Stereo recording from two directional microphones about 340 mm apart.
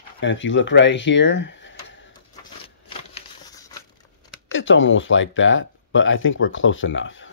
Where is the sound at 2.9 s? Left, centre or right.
Centre.